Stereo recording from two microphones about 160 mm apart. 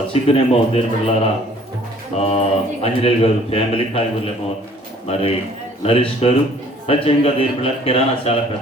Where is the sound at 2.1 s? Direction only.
40° left (ahead or behind).